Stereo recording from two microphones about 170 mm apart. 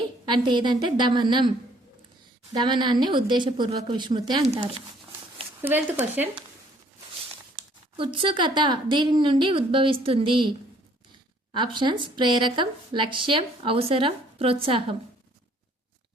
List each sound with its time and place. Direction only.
0.3 s speech: 25° right (ahead or behind)
2.5 s speech: 25° right (ahead or behind)
5.6 s speech: 10° right (ahead or behind)
7.9 s speech: 30° right (ahead or behind)
11.5 s speech: 25° right (ahead or behind)